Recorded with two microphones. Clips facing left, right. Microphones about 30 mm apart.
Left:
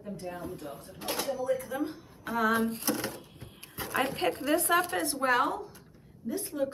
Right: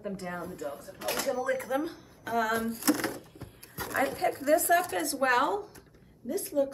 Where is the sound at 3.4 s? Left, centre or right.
Left.